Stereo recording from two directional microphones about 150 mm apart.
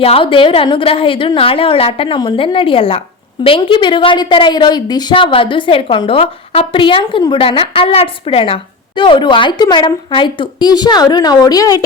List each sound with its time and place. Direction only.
0.0 s a woman's voice: 40° left (ahead or behind)